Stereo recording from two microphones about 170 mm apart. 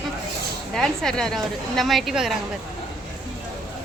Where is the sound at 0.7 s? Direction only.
5° left (ahead or behind).